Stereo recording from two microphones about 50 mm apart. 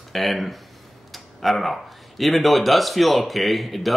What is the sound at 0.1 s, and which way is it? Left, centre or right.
Speech, centre.